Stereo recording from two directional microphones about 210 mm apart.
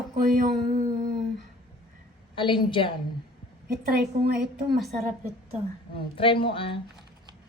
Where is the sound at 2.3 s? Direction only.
25° left (ahead or behind).